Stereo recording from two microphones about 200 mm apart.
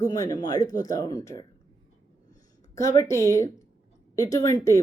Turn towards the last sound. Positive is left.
turn(degrees=15)  # may be behind; listen again after turning